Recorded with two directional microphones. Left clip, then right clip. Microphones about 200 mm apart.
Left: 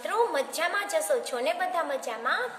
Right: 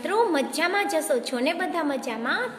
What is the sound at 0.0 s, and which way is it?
A woman's voice, 10° right (ahead or behind).